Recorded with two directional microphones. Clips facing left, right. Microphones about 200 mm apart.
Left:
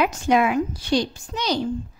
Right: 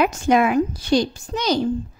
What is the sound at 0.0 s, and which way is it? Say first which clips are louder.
A woman's voice: right 2 dB; 45° right (ahead or behind).